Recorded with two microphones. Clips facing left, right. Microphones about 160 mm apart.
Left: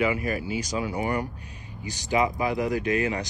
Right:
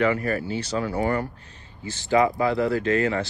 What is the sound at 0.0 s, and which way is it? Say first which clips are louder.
Speech: right 3 dB; 10° left (ahead or behind).